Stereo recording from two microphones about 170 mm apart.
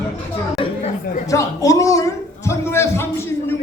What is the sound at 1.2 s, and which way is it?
A man's voice, 20° left (ahead or behind).